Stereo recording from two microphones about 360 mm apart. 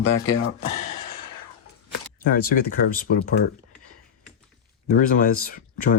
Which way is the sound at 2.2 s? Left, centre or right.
Left.